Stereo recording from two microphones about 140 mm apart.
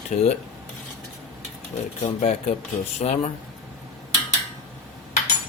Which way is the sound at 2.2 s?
50° left (ahead or behind).